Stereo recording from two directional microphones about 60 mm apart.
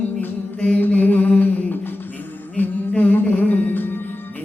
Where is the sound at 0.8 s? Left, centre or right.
Left.